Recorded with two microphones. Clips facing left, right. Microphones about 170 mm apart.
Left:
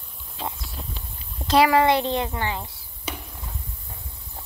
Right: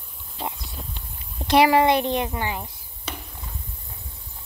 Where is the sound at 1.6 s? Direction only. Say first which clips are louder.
Right 1 dB; 20° right (ahead or behind).